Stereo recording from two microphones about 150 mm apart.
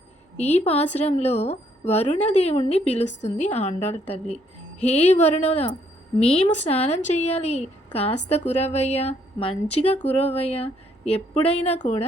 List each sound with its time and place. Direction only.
0.3 s speech: 45° left (ahead or behind)